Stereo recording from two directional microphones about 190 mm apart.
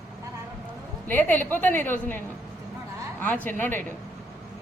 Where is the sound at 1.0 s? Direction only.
10° left (ahead or behind).